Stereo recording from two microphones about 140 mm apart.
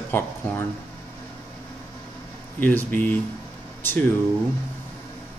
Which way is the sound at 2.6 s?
15° left (ahead or behind).